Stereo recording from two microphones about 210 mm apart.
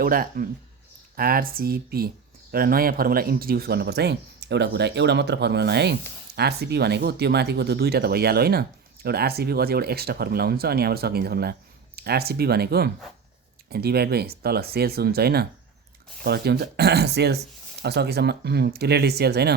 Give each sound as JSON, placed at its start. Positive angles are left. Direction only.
{"t": 0.0, "sound": "speech", "side_deg": -45}